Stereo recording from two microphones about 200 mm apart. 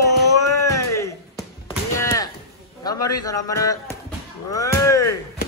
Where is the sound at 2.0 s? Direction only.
15° left (ahead or behind).